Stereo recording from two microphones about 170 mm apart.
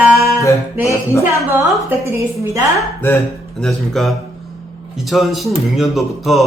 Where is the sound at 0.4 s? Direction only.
15° left (ahead or behind).